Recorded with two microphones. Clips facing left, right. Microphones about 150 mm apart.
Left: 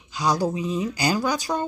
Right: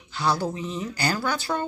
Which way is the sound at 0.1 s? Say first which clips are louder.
Left 2 dB; 15° left (ahead or behind).